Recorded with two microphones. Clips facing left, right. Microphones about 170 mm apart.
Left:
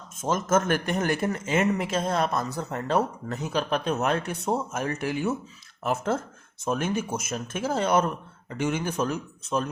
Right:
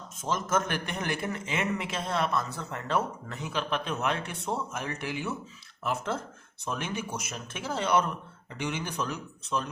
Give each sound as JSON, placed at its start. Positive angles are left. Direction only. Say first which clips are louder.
{"t": 0.2, "sound": "speech", "louder": "left 5 dB", "side_deg": 50}